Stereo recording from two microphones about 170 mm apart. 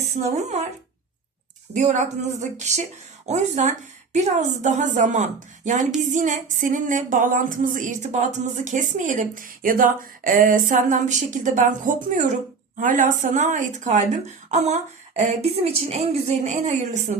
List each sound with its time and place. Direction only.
0.2 s speech: 40° right (ahead or behind)
1.7 s music: 45° right (ahead or behind)
15.2 s speech: 40° right (ahead or behind)